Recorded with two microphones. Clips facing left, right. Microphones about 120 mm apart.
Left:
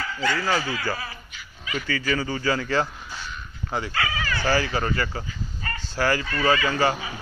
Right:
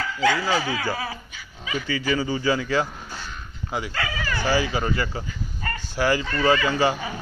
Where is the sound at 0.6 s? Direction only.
90° right.